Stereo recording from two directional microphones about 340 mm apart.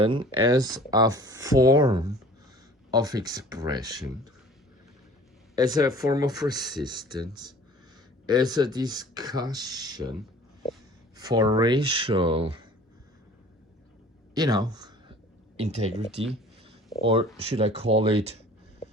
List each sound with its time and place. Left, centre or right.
0.0 s speech: centre
5.5 s speech: centre
11.2 s speech: centre
14.3 s speech: centre